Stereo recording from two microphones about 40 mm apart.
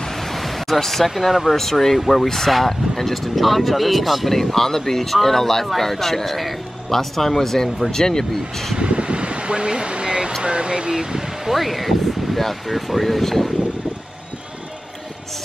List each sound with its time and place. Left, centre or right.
0.0 s speech: centre
8.7 s a sound: right
10.4 s speech: right
11.5 s speech: centre